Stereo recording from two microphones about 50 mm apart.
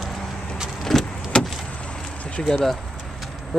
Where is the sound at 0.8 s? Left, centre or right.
Centre.